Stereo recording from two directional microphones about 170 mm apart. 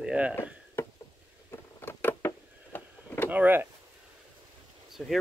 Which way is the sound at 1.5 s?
15° left (ahead or behind).